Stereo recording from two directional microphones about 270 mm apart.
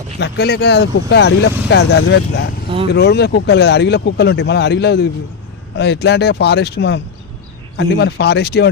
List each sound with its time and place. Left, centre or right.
0.2 s speech: left